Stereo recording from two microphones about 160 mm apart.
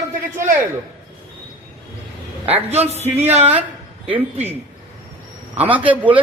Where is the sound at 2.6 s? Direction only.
40° right (ahead or behind).